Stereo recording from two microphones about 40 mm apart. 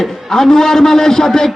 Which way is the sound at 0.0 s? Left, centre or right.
Centre.